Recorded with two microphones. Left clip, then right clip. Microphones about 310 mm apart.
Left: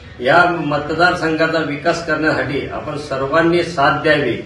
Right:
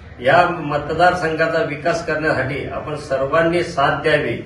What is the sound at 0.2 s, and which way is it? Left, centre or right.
A man's voice, centre.